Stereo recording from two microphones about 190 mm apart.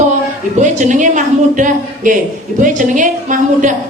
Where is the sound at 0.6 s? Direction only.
40° right (ahead or behind).